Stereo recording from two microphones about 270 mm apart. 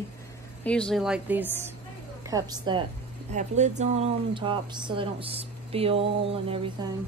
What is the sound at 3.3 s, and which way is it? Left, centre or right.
Speech, right.